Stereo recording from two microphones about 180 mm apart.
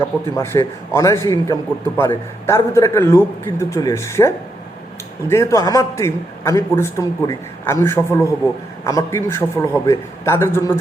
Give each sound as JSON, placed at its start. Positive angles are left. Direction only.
{"t": 0.0, "sound": "a man's voice", "side_deg": 15}
{"t": 5.3, "sound": "a man's voice", "side_deg": 15}